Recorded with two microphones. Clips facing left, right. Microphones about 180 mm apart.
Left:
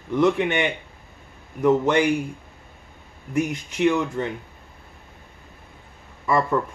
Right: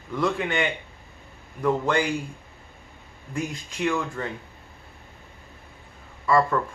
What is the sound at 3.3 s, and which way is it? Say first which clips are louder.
Speech: left 7 dB; 20° left (ahead or behind).